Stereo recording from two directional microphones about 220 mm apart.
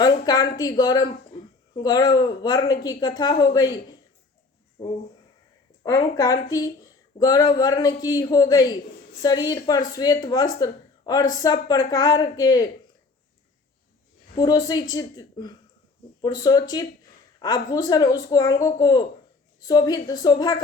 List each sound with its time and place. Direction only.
0.0 s a woman's voice: 20° left (ahead or behind)
4.8 s speech: 25° left (ahead or behind)
14.3 s speech: 15° left (ahead or behind)